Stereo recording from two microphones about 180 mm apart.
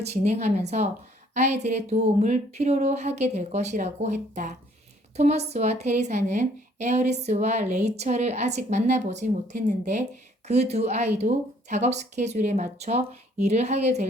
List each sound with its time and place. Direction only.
0.0 s a woman's voice: 40° right (ahead or behind)